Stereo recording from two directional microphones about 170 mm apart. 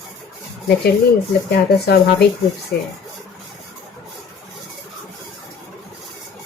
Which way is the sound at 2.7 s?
65° left (ahead or behind).